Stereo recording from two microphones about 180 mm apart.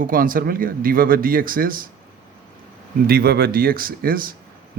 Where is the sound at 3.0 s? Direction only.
60° right (ahead or behind).